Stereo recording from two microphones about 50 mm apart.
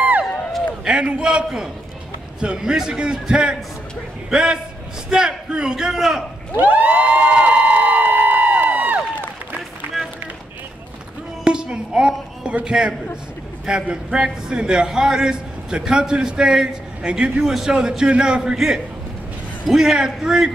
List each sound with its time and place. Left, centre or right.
0.0 s run: right
0.8 s a man's voice: centre
5.9 s a man's voice: centre
6.5 s cheering: right
9.9 s run: centre
11.4 s a sound: centre
12.4 s a man's voice: centre